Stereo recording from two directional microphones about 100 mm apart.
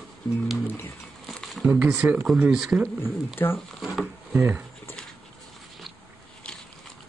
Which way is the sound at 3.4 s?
20° left (ahead or behind).